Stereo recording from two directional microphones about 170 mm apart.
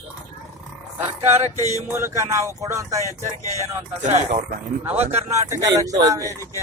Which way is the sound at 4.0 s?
45° right (ahead or behind).